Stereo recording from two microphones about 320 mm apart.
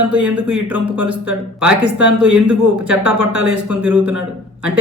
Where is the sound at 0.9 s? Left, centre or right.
Right.